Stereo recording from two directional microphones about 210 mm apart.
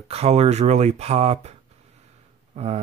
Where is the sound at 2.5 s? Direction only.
30° right (ahead or behind).